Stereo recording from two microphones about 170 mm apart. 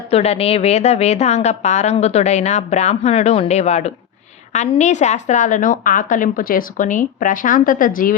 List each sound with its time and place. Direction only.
0.1 s a woman's voice: 35° left (ahead or behind); by 8.1 s 55° left (ahead or behind)